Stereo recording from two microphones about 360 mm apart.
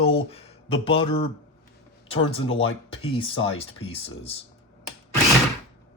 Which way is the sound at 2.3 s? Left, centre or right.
Centre.